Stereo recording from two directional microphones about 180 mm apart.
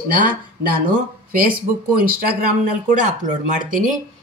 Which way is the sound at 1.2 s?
50° right (ahead or behind).